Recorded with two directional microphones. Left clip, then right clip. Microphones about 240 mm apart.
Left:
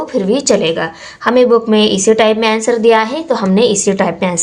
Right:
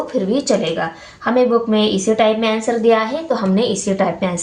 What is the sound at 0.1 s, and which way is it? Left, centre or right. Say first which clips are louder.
A woman's voice: left 6 dB; left.